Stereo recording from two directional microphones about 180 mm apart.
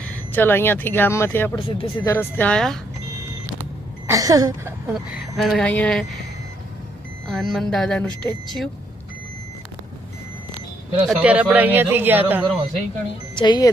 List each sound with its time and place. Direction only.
0.0 s speech: 10° left (ahead or behind)
1.8 s speech: 25° left (ahead or behind)
2.1 s a woman's voice: 10° left (ahead or behind)
4.0 s a sound: 20° right (ahead or behind)
4.9 s speech: centre (ahead or behind)
7.3 s speech: centre (ahead or behind)
11.0 s a man's voice: 5° right (ahead or behind)
13.3 s speech: 25° left (ahead or behind)